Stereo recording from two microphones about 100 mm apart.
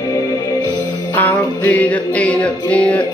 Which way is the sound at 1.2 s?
15° left (ahead or behind).